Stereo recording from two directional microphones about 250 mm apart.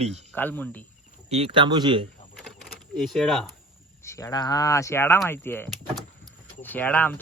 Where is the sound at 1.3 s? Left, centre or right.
Right.